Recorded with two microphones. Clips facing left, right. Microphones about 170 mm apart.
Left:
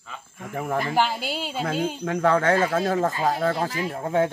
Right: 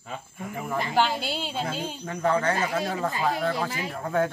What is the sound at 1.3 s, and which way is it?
Speech, 5° left (ahead or behind).